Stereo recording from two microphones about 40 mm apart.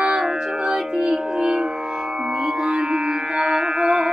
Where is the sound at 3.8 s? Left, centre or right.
Right.